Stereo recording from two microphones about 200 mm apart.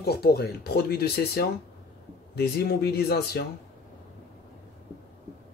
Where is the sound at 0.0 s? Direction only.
50° left (ahead or behind).